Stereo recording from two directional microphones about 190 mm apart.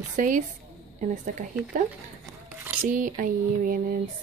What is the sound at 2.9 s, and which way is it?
Speech, 45° right (ahead or behind).